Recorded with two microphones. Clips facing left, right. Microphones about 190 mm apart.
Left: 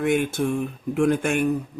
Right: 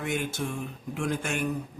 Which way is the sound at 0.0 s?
55° left (ahead or behind).